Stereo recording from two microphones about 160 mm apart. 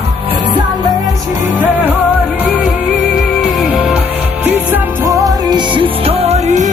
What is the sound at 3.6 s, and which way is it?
Music, centre (ahead or behind).